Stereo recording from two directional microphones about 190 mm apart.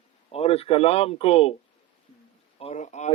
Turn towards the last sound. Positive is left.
turn(degrees=40)  # may be behind; listen again after turning